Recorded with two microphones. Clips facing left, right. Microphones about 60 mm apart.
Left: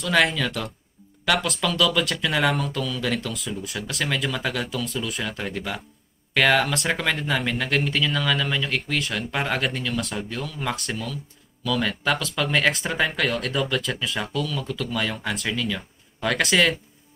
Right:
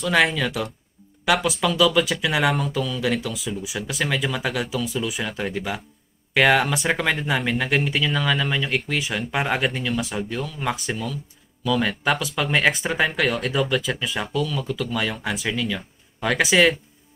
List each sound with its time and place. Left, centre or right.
0.0 s speech: centre